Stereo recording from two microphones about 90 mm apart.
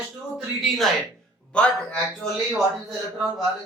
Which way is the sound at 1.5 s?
15° left (ahead or behind).